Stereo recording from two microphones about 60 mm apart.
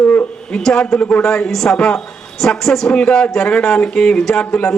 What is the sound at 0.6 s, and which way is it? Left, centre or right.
A woman's voice, centre.